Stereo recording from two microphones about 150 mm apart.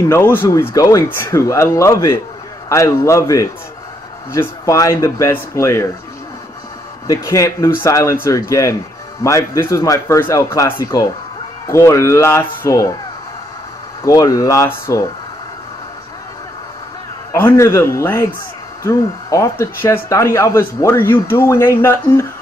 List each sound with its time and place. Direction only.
0.1 s speech: 15° left (ahead or behind)
7.1 s speech: 20° left (ahead or behind)
14.0 s speech: 20° left (ahead or behind)
17.3 s speech: 15° left (ahead or behind)